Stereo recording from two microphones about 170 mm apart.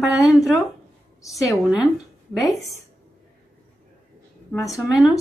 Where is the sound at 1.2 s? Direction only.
20° left (ahead or behind).